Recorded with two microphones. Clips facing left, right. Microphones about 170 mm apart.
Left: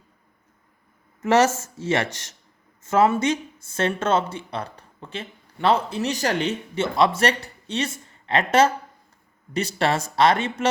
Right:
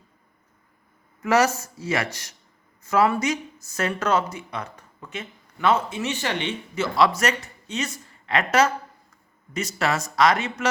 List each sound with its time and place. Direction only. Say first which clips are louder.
1.2 s speech: left 2 dB; 25° left (ahead or behind)
6.7 s speech: even; 25° left (ahead or behind)